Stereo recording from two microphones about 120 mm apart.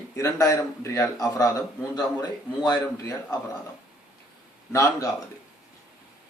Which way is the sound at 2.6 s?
30° left (ahead or behind).